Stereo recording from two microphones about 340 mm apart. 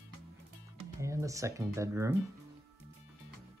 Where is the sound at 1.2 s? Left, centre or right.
Centre.